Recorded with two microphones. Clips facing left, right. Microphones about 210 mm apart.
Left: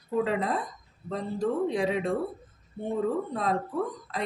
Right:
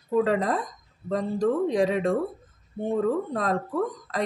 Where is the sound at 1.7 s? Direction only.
45° right (ahead or behind).